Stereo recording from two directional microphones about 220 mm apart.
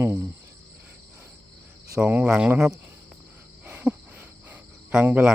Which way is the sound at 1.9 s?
5° right (ahead or behind).